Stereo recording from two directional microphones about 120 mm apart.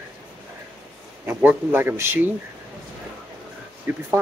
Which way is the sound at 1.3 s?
15° right (ahead or behind).